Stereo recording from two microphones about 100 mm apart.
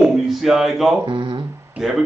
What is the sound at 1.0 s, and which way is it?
Speech, 55° right (ahead or behind).